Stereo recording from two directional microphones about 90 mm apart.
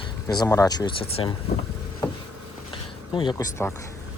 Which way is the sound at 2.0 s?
40° left (ahead or behind).